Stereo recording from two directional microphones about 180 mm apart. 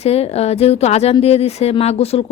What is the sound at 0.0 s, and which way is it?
Speech, 35° left (ahead or behind).